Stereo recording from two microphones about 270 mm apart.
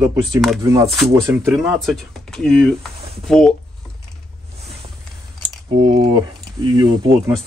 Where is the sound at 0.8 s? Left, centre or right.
Centre.